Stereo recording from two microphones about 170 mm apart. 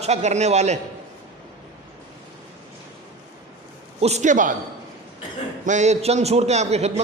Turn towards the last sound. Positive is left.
turn(degrees=-40)  # may be behind; listen again after turning